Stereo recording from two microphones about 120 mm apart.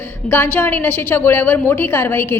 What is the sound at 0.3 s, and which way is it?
A woman's voice, 15° left (ahead or behind).